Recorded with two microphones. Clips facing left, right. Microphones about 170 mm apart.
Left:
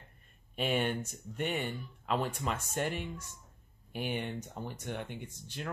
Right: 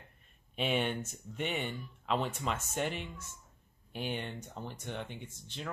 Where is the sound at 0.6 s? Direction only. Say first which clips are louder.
Left 1 dB; 5° left (ahead or behind).